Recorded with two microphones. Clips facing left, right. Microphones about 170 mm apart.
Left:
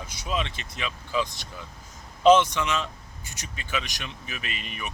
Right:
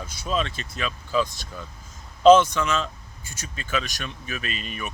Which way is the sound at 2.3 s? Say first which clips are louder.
Right 3 dB; 20° left (ahead or behind).